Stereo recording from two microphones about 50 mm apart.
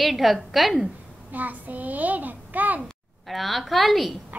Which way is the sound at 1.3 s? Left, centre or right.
Right.